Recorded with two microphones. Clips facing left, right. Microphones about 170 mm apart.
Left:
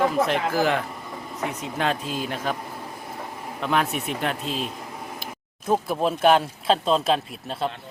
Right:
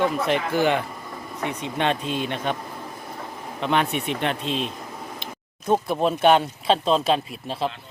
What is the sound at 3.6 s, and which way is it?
Speech, centre (ahead or behind).